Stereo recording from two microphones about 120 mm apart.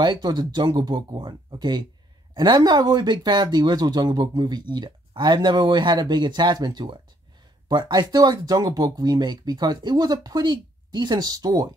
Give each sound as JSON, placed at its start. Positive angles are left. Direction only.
{"t": 0.0, "sound": "speech", "side_deg": -35}